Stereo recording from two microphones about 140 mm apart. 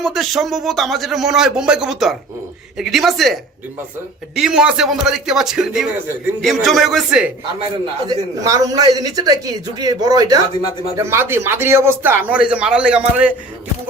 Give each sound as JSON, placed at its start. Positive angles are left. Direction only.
{"t": 0.0, "sound": "a man's voice", "side_deg": 0}
{"t": 4.4, "sound": "a man's voice", "side_deg": -5}
{"t": 8.0, "sound": "speech", "side_deg": -25}